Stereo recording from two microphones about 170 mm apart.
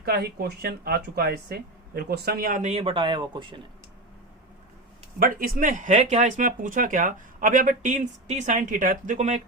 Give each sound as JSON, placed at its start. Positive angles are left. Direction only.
{"t": 0.0, "sound": "speech", "side_deg": -70}
{"t": 5.2, "sound": "speech", "side_deg": -55}